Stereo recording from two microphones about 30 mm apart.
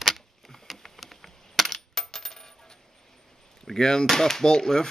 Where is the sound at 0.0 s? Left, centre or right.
Centre.